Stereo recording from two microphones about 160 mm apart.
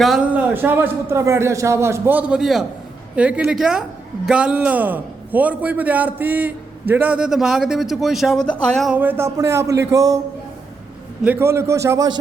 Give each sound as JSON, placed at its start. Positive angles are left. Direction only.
{"t": 0.0, "sound": "a man's voice", "side_deg": -5}
{"t": 8.9, "sound": "a man's voice", "side_deg": -10}
{"t": 11.2, "sound": "a man's voice", "side_deg": -10}